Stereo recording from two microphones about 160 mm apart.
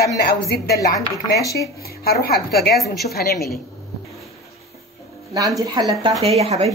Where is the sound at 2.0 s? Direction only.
70° left (ahead or behind).